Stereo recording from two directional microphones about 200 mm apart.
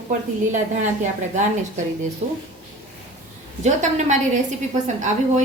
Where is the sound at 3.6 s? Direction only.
35° right (ahead or behind).